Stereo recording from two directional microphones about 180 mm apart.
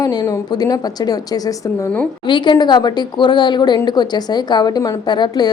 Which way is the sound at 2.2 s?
25° left (ahead or behind).